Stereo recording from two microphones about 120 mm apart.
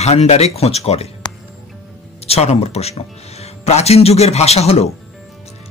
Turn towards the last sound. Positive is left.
turn(degrees=60)  # may be behind; listen again after turning